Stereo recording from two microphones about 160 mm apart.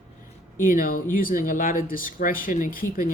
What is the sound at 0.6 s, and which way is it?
Speech, 60° left (ahead or behind).